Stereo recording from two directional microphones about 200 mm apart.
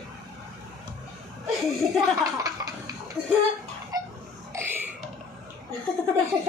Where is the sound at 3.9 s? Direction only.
20° right (ahead or behind).